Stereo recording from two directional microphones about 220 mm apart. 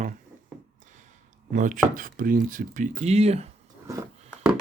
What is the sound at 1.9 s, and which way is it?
Speech, 40° right (ahead or behind).